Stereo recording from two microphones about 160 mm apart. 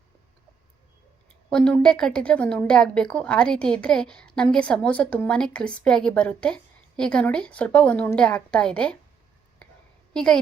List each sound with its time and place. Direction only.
1.5 s a woman's voice: 5° left (ahead or behind)
10.1 s a woman's voice: 5° left (ahead or behind)